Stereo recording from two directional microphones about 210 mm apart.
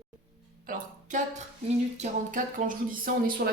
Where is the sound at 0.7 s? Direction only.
40° right (ahead or behind).